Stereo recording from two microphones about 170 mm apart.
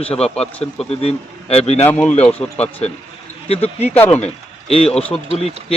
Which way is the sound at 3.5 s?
35° left (ahead or behind).